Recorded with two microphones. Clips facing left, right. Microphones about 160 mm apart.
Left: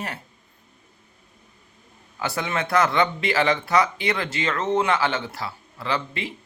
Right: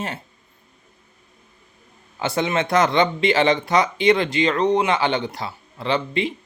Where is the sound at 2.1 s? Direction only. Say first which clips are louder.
Right 5 dB; 20° right (ahead or behind).